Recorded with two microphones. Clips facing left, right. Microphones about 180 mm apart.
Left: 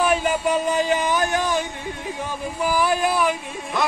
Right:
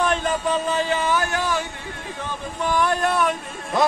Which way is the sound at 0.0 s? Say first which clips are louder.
Left 2 dB; 10° left (ahead or behind).